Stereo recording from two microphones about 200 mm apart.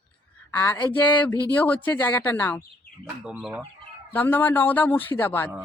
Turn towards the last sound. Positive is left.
turn(degrees=10)  # may be behind; listen again after turning